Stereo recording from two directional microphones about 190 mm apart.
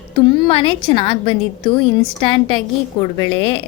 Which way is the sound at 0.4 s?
30° left (ahead or behind).